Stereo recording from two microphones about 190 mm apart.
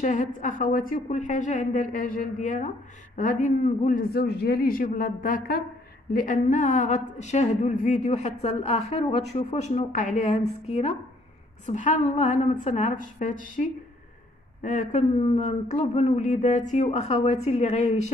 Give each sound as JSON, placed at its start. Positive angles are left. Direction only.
{"t": 0.0, "sound": "a woman's voice", "side_deg": 40}